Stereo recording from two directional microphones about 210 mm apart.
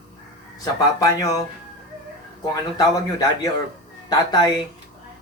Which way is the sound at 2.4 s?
20° left (ahead or behind).